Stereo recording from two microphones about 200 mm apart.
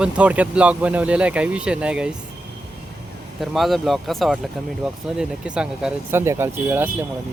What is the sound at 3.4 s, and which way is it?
Speech, centre (ahead or behind).